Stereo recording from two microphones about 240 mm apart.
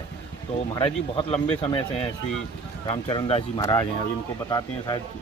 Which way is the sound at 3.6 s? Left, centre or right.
Centre.